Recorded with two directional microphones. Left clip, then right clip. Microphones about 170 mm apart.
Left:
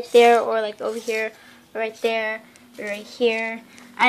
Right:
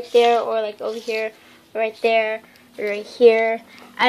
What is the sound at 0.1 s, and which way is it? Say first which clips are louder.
Speech: left 1 dB; 25° left (ahead or behind).